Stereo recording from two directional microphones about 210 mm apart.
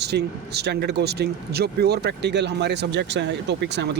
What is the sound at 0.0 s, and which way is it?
Speech, 50° right (ahead or behind).